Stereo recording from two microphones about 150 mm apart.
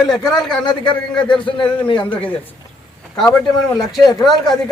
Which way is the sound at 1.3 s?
35° left (ahead or behind).